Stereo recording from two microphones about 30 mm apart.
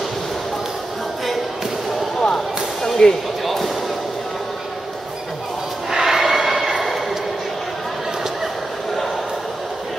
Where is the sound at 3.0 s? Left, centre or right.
Left.